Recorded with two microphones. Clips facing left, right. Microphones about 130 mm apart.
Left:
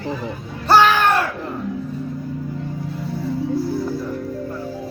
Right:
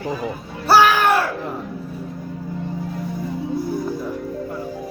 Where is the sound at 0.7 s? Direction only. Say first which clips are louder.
Even; 10° right (ahead or behind).